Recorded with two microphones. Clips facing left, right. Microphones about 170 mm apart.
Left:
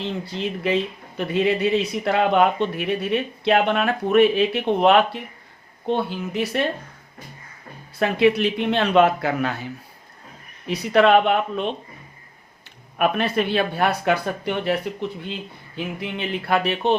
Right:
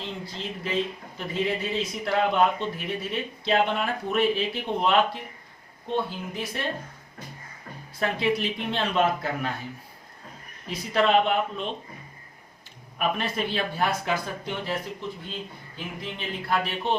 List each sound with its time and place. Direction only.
0.0 s speech: 70° left (ahead or behind)
7.9 s speech: 65° left (ahead or behind)
10.7 s speech: 70° left (ahead or behind)
13.0 s speech: 65° left (ahead or behind)